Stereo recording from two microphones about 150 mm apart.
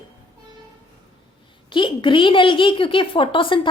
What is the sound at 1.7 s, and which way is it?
A woman's voice, 35° left (ahead or behind).